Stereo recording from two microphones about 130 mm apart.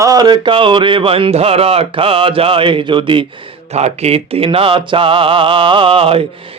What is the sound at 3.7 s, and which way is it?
Music, 55° right (ahead or behind).